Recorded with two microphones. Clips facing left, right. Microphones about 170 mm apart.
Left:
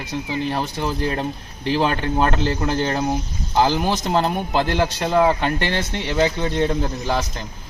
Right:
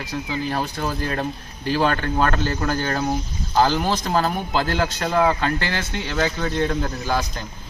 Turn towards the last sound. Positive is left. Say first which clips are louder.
# left 1 dB
turn(degrees=20)  # may be behind; listen again after turning